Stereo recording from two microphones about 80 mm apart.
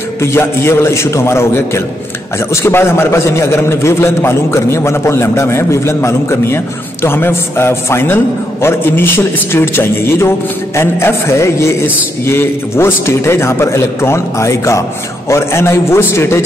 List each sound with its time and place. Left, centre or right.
0.2 s a man's voice: left